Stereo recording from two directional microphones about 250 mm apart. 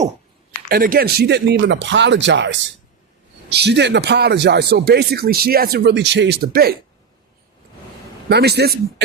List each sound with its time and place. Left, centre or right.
0.7 s a man's voice: right
8.3 s a man's voice: right